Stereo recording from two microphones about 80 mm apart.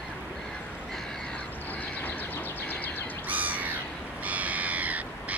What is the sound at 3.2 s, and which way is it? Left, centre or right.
Crow, right.